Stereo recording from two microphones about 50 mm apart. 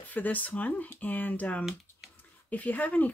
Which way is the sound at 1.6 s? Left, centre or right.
Centre.